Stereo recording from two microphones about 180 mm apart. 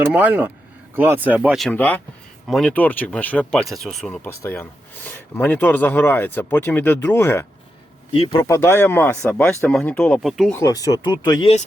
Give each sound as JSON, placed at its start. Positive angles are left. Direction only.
{"t": 0.1, "sound": "speech", "side_deg": -10}
{"t": 8.1, "sound": "speech", "side_deg": 35}
{"t": 8.4, "sound": "speech", "side_deg": 15}
{"t": 10.5, "sound": "speech", "side_deg": 20}